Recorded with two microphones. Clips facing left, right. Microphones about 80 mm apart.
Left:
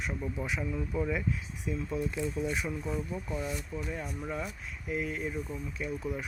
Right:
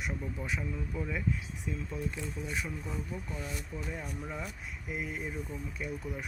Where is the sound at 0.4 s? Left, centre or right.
Centre.